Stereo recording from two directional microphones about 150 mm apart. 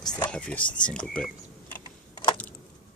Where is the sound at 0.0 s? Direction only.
25° left (ahead or behind).